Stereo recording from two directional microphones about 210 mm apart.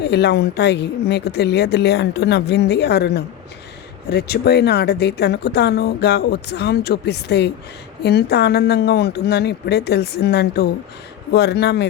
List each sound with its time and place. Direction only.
0.0 s speech: 55° left (ahead or behind)